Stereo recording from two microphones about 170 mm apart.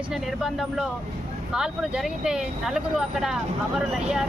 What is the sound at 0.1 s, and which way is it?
Speech, centre (ahead or behind).